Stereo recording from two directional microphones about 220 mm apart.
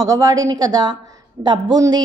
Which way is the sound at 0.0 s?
15° right (ahead or behind).